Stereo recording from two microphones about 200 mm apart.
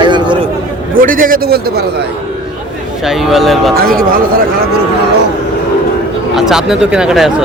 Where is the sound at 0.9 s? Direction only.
45° right (ahead or behind).